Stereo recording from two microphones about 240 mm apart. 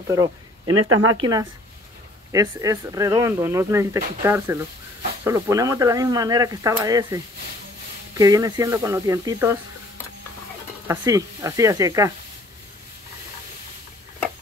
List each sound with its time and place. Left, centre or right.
0.7 s speech: right
1.1 s a woman's voice: centre
8.2 s speech: centre
10.9 s speech: centre